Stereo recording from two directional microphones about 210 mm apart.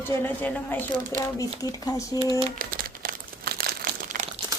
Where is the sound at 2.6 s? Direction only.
45° right (ahead or behind).